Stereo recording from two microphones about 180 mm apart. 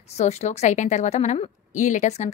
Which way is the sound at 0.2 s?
40° left (ahead or behind).